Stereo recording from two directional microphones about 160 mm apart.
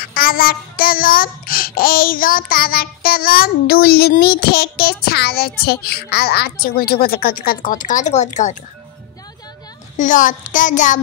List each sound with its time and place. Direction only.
0.0 s child singing: 65° left (ahead or behind); by 8.5 s 50° left (ahead or behind)
9.9 s a child's voice: 55° left (ahead or behind)